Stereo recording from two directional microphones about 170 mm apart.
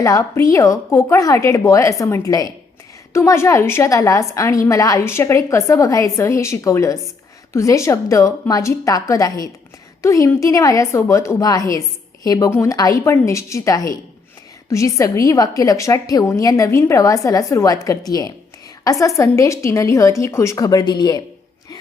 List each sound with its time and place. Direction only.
0.0 s a woman's voice: 20° left (ahead or behind)